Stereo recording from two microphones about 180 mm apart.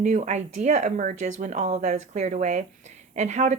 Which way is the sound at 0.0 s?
40° right (ahead or behind).